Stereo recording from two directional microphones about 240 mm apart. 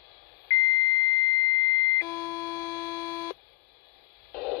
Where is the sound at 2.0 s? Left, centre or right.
Centre.